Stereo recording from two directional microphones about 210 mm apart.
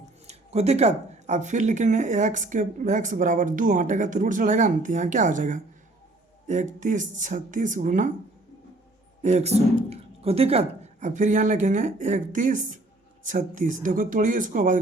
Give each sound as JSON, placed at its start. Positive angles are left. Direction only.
{"t": 0.3, "sound": "speech", "side_deg": -30}
{"t": 9.2, "sound": "speech", "side_deg": -35}